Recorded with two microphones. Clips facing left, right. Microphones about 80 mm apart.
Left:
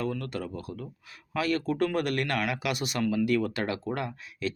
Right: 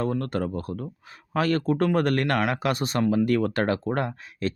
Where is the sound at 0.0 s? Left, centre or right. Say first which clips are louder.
Right 6 dB; right.